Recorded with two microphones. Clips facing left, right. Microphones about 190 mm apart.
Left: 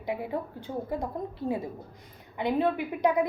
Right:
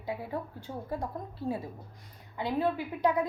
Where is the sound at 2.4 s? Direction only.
20° left (ahead or behind).